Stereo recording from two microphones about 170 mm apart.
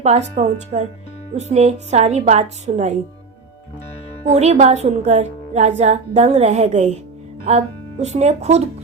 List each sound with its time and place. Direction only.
0.0 s a woman's voice: 40° right (ahead or behind)
4.3 s a woman's voice: 40° right (ahead or behind)